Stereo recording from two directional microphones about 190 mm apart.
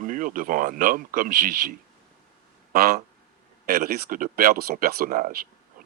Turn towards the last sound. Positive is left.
turn(degrees=-45)  # may be behind; listen again after turning